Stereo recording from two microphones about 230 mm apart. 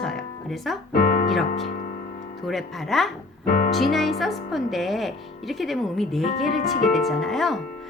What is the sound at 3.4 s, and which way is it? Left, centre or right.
Music, left.